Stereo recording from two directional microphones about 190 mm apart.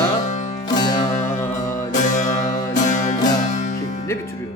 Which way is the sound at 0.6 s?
20° left (ahead or behind).